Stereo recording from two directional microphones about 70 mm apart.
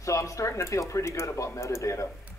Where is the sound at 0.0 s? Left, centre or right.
Left.